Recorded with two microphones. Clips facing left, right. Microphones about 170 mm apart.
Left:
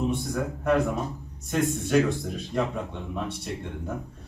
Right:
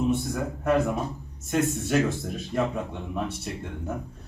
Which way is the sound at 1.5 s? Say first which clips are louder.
Even; centre (ahead or behind).